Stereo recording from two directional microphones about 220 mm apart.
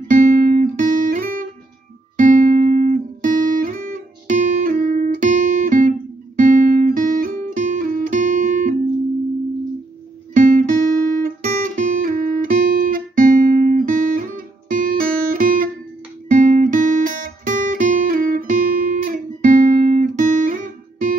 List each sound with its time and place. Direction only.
0.1 s guitar: 40° right (ahead or behind)
10.3 s music: 35° right (ahead or behind)
11.2 s guitar: 35° right (ahead or behind)